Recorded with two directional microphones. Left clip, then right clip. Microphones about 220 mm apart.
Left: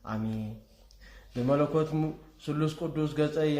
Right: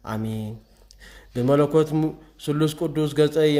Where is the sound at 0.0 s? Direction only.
40° right (ahead or behind).